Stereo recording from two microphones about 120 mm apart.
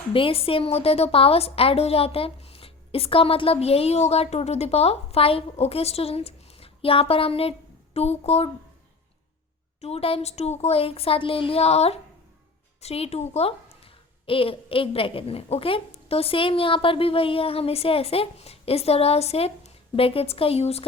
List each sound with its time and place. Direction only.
0.1 s a woman's voice: 50° left (ahead or behind)
9.8 s a woman's voice: 55° left (ahead or behind)